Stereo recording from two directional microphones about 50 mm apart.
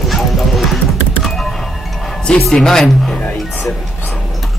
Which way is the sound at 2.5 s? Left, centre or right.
Centre.